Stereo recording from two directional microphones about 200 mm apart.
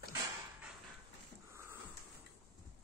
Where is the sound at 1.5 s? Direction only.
15° right (ahead or behind).